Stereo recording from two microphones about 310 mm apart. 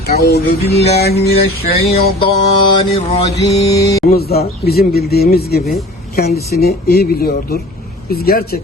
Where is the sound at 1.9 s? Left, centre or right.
Centre.